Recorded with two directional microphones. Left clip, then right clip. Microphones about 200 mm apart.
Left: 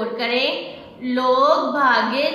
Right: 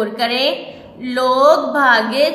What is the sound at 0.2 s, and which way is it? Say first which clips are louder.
A woman's voice: right 3 dB; 50° right (ahead or behind).